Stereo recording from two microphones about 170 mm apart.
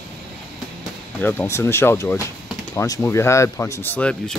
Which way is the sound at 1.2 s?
10° left (ahead or behind).